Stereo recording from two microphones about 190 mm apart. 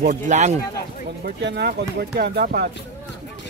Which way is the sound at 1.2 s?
60° right (ahead or behind).